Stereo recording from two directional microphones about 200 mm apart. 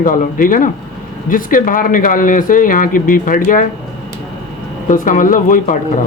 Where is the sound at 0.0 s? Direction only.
45° left (ahead or behind).